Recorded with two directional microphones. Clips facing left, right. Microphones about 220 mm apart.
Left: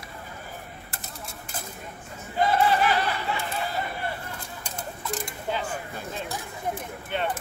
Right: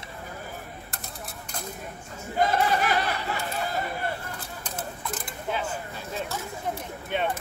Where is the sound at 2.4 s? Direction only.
45° right (ahead or behind).